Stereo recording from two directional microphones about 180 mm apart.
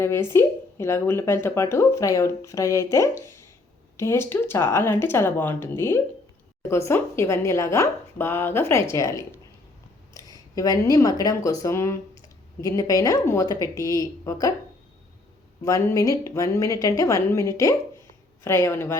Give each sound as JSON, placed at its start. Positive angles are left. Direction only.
{"t": 0.0, "sound": "speech", "side_deg": 15}
{"t": 15.6, "sound": "speech", "side_deg": 15}